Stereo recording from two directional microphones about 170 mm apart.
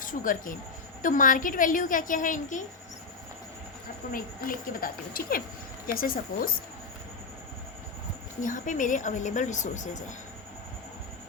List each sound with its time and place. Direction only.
0.0 s speech: 50° left (ahead or behind)
4.1 s a woman's voice: 55° left (ahead or behind)
8.4 s speech: 50° left (ahead or behind)